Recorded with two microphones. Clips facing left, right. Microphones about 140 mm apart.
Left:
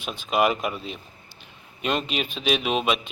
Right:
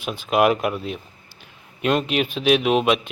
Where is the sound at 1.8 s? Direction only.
5° right (ahead or behind).